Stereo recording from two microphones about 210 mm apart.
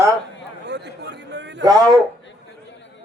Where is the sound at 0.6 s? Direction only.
55° right (ahead or behind).